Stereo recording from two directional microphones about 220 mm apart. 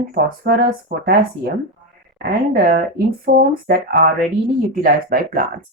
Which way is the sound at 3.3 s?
40° right (ahead or behind).